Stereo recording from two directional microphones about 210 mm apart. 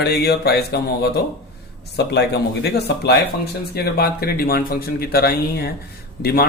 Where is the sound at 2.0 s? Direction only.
50° left (ahead or behind).